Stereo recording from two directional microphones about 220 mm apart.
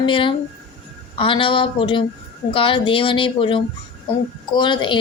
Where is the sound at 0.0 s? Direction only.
25° left (ahead or behind).